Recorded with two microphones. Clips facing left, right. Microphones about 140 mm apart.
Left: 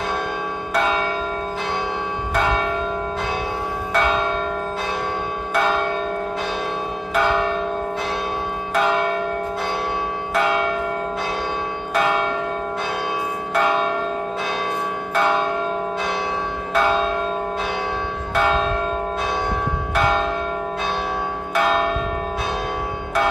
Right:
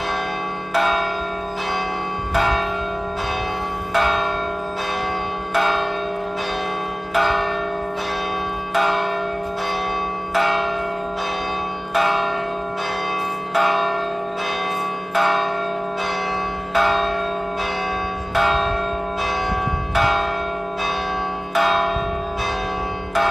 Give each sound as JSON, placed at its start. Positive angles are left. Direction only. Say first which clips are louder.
{"t": 0.7, "sound": "church bell", "louder": "right 1 dB", "side_deg": 0}
{"t": 3.9, "sound": "church bell", "louder": "even", "side_deg": 0}
{"t": 10.3, "sound": "church bell", "louder": "even", "side_deg": 0}
{"t": 16.7, "sound": "church bell", "louder": "even", "side_deg": 0}
{"t": 20.0, "sound": "church bell", "louder": "even", "side_deg": -5}
{"t": 21.5, "sound": "church bell", "louder": "even", "side_deg": 0}